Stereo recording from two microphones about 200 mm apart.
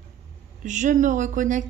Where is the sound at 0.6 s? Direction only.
40° right (ahead or behind).